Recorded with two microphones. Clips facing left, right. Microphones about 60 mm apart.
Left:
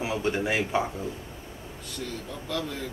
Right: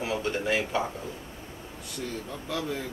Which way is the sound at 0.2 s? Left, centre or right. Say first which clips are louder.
Left 1 dB; centre.